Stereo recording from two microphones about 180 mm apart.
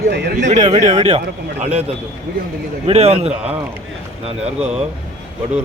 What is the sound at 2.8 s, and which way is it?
A man's voice, 35° right (ahead or behind).